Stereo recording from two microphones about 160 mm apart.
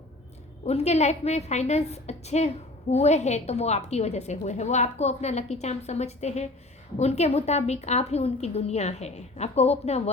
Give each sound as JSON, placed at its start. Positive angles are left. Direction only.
{"t": 0.6, "sound": "a woman's voice", "side_deg": 40}